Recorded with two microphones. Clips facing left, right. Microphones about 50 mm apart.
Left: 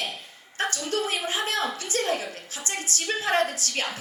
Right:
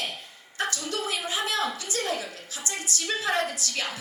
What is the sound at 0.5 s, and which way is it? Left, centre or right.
A woman's voice, left.